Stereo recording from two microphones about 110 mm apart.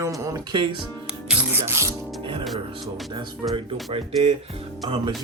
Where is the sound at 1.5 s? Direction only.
25° right (ahead or behind).